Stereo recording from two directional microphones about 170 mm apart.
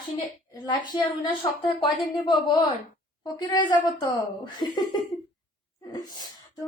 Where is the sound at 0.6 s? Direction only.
25° left (ahead or behind).